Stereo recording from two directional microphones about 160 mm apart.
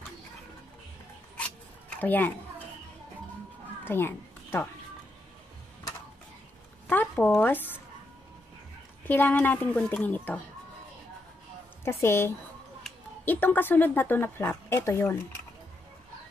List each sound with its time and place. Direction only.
1.3 s zipper: 10° left (ahead or behind)
3.8 s a sound: 15° left (ahead or behind)
6.9 s speech: 10° left (ahead or behind)
9.0 s speech: 10° left (ahead or behind)
11.8 s speech: 15° left (ahead or behind)